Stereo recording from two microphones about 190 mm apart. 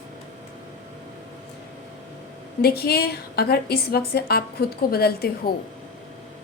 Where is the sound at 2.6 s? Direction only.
55° left (ahead or behind).